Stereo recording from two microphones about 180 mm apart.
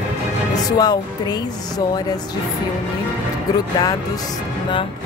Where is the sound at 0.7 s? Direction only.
20° left (ahead or behind).